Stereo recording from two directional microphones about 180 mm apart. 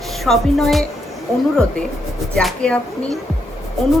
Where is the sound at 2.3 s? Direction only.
Centre (ahead or behind).